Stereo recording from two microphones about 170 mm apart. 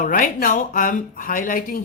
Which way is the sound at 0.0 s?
55° left (ahead or behind).